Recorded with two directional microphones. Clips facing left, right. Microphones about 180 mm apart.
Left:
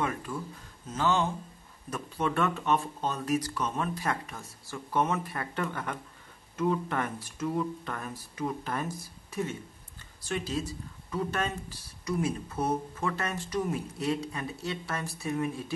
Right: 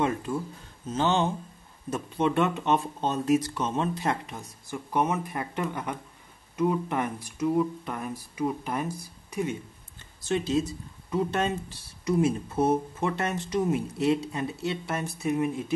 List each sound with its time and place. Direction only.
0.0 s speech: 25° right (ahead or behind)